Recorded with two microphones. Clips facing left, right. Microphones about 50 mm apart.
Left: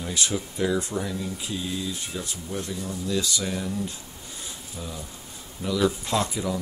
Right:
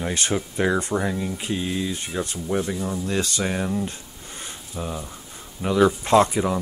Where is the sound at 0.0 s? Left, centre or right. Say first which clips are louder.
Right 4 dB; right.